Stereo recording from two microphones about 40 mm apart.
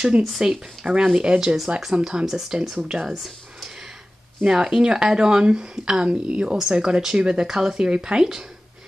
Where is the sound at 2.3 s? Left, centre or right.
Centre.